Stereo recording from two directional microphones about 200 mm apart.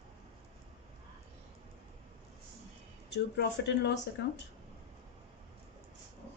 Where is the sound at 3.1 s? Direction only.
55° left (ahead or behind).